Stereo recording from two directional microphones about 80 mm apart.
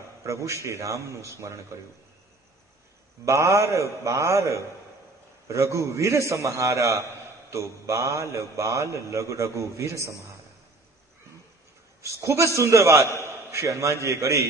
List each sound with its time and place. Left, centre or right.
0.2 s a man's voice: right
3.3 s a man's voice: right
12.0 s a man's voice: right